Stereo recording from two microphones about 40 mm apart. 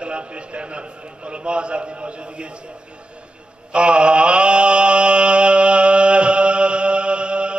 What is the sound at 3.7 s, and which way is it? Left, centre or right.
Mantra, right.